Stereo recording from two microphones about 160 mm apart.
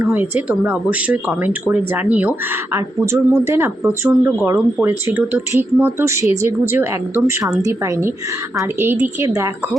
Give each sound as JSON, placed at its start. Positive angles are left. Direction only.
{"t": 0.0, "sound": "speech", "side_deg": -10}